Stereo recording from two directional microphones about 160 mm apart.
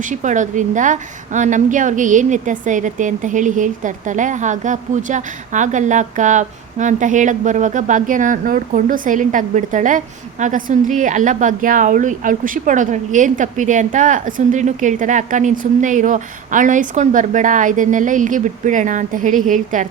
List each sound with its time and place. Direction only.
0.0 s a woman's voice: 50° right (ahead or behind)